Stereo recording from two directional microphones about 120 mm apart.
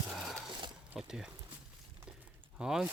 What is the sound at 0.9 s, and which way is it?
Speech, 5° right (ahead or behind).